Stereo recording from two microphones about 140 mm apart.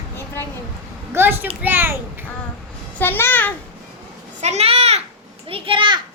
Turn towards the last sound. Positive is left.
turn(degrees=-35)  # may be behind; listen again after turning